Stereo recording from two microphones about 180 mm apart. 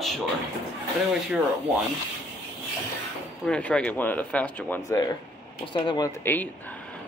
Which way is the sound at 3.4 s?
5° left (ahead or behind).